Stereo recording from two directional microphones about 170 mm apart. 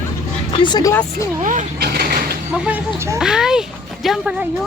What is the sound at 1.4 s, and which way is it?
Speech, 50° right (ahead or behind).